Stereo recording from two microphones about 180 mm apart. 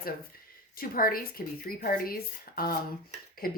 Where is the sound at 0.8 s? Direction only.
55° left (ahead or behind).